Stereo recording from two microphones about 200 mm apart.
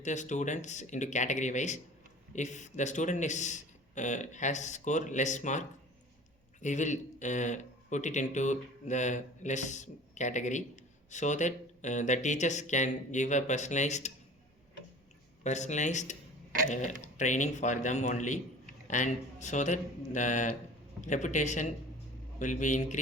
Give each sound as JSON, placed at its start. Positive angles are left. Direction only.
{"t": 0.0, "sound": "speech", "side_deg": 35}
{"t": 15.4, "sound": "speech", "side_deg": 35}